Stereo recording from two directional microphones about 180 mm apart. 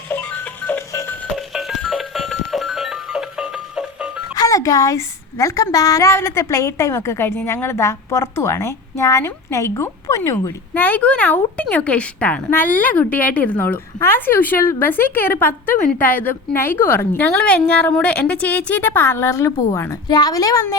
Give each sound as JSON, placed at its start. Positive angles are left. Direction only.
{"t": 0.6, "sound": "music", "side_deg": 10}
{"t": 1.4, "sound": "music", "side_deg": 0}
{"t": 4.4, "sound": "a woman's voice", "side_deg": 20}